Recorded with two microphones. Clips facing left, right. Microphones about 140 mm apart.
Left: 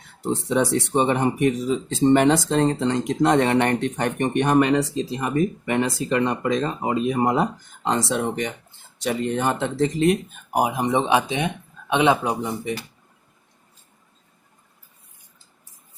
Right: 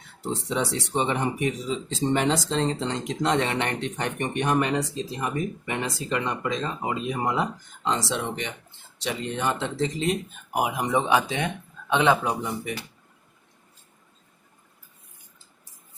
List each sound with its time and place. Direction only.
0.2 s speech: 55° left (ahead or behind)
10.5 s speech: 35° left (ahead or behind)